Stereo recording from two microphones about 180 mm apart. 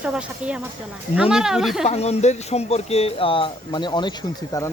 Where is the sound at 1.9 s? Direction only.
35° left (ahead or behind); by 4.7 s 20° left (ahead or behind).